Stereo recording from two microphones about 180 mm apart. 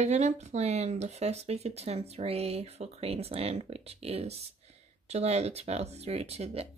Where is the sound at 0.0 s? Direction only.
40° right (ahead or behind).